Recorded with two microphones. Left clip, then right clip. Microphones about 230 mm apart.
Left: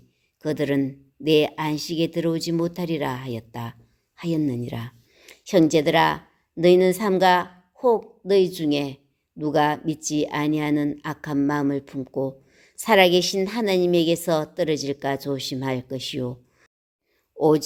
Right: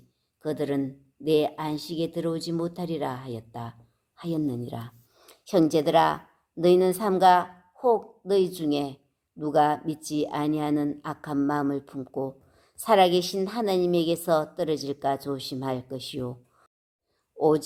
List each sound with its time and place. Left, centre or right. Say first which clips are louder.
0.4 s speech: left 5 dB; left
4.3 s a woman's voice: left 4 dB; left
4.7 s speech: left 3 dB; left
5.1 s a woman's voice: left 4 dB; left
17.3 s speech: left 3 dB; left